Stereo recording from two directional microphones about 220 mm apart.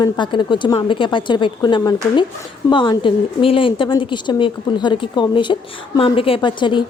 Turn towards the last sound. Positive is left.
turn(degrees=20)  # may be behind; listen again after turning